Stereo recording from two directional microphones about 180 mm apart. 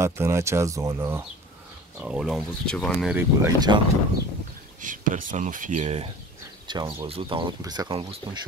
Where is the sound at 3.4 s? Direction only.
20° right (ahead or behind).